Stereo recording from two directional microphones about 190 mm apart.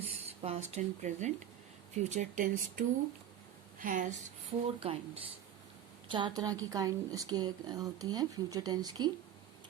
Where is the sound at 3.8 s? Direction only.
45° right (ahead or behind).